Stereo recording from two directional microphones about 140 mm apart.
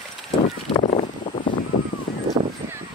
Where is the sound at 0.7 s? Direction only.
50° left (ahead or behind).